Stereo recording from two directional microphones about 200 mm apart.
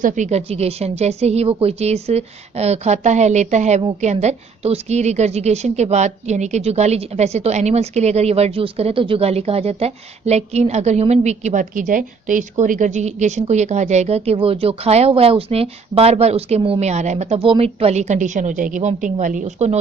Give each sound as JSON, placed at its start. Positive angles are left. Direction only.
{"t": 0.0, "sound": "a woman's voice", "side_deg": -35}